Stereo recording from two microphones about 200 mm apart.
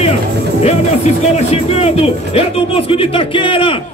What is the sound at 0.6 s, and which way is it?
Speech, 35° left (ahead or behind).